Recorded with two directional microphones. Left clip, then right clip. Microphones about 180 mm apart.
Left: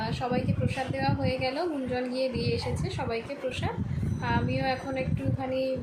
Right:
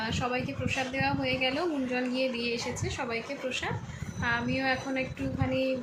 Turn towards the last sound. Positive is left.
turn(degrees=5)  # may be behind; listen again after turning